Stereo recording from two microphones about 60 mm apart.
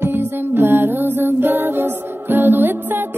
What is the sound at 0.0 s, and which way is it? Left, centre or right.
Music, right.